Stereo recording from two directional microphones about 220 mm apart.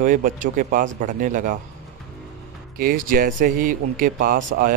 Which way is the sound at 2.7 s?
40° right (ahead or behind).